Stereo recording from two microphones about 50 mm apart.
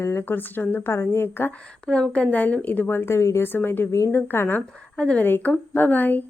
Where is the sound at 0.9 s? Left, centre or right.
Left.